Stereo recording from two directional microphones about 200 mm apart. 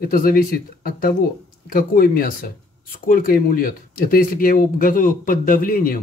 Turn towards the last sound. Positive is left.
turn(degrees=45)  # may be behind; listen again after turning